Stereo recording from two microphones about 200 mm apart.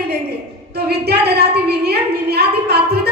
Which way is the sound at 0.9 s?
55° right (ahead or behind).